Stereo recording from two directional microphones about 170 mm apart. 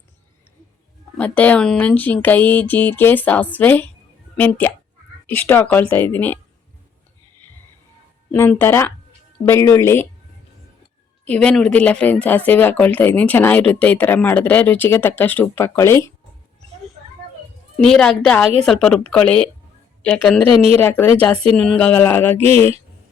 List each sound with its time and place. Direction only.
1.1 s speech: 10° left (ahead or behind)
8.3 s speech: 10° left (ahead or behind)
11.3 s speech: 5° left (ahead or behind)
17.7 s a woman's voice: 5° left (ahead or behind)